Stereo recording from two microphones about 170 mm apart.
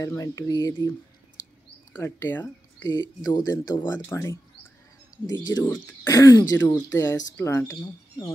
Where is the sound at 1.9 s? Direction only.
15° left (ahead or behind).